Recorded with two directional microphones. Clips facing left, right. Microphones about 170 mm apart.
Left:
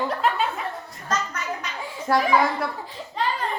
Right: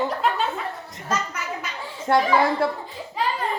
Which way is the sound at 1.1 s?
10° right (ahead or behind).